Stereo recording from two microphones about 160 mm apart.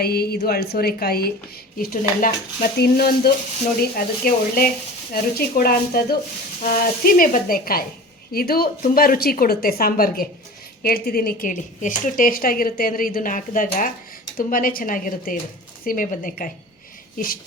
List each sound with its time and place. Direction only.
0.0 s a woman's voice: 75° left (ahead or behind)
1.8 s a woman's voice: 60° left (ahead or behind); by 3.3 s 80° left
3.9 s a woman's voice: 65° left (ahead or behind)